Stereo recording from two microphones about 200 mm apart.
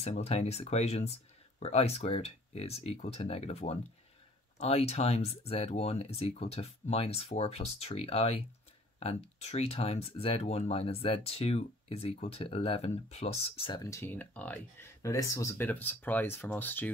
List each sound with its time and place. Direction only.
0.0 s speech: 30° left (ahead or behind); by 16.9 s 10° left (ahead or behind)